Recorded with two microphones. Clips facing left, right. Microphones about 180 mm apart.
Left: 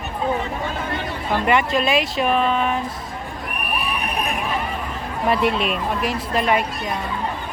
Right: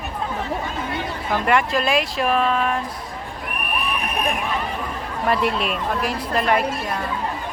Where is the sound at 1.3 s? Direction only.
Centre (ahead or behind).